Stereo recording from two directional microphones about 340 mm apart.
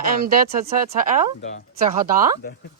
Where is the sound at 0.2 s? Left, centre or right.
Right.